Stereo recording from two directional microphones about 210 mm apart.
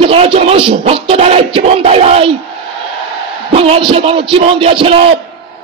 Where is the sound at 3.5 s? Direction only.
25° right (ahead or behind).